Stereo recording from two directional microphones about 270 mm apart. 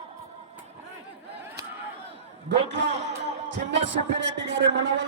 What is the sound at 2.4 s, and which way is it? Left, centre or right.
A man's voice, right.